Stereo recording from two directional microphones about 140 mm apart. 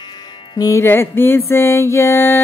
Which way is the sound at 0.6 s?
20° left (ahead or behind).